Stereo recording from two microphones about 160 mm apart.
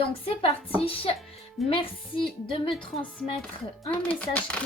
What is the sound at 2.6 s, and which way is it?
Speech, 5° left (ahead or behind).